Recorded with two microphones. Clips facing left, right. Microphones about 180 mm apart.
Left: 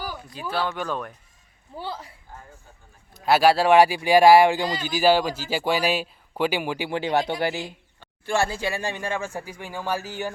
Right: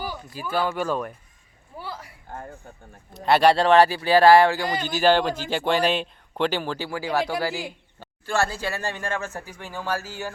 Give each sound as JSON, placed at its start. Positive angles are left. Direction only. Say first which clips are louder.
{"t": 0.5, "sound": "speech", "louder": "right 3 dB", "side_deg": -5}
{"t": 1.8, "sound": "a man's voice", "louder": "left 3 dB", "side_deg": 25}
{"t": 3.1, "sound": "speech", "louder": "even", "side_deg": 0}